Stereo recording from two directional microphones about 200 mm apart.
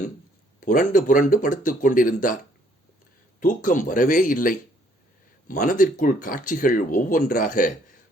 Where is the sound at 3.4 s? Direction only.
40° left (ahead or behind).